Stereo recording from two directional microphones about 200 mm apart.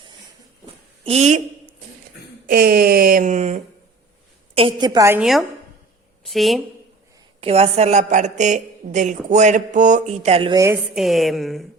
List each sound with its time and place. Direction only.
1.0 s a woman's voice: 35° right (ahead or behind)
2.5 s a sound: 50° right (ahead or behind)
4.5 s a woman's voice: 25° right (ahead or behind)
5.2 s a woman's voice: centre (ahead or behind)
7.4 s a woman's voice: 30° right (ahead or behind)
10.9 s speech: centre (ahead or behind)